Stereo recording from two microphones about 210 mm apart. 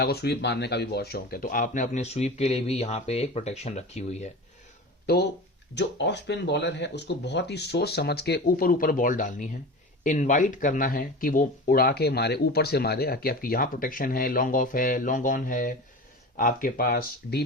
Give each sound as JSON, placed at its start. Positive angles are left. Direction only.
{"t": 0.0, "sound": "speech", "side_deg": 50}
{"t": 5.0, "sound": "speech", "side_deg": 50}